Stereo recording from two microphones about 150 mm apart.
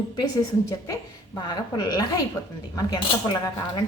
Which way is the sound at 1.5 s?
25° left (ahead or behind).